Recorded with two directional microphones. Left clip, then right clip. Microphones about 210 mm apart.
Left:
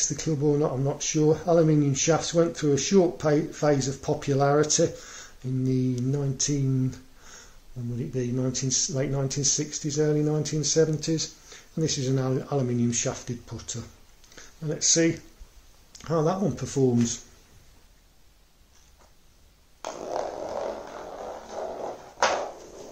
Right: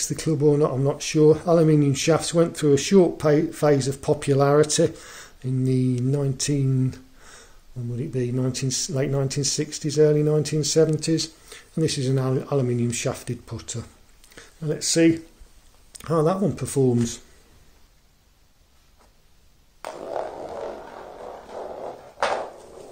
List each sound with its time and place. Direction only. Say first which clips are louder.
0.0 s speech: right 5 dB; 45° right (ahead or behind)